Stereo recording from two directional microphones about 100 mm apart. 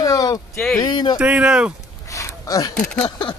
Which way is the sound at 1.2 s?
10° right (ahead or behind).